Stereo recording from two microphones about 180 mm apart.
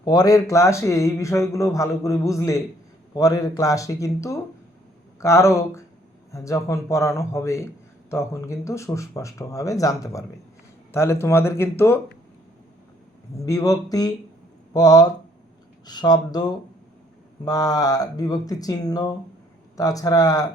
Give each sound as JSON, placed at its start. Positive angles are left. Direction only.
{"t": 0.0, "sound": "a man's voice", "side_deg": 20}
{"t": 13.3, "sound": "speech", "side_deg": 20}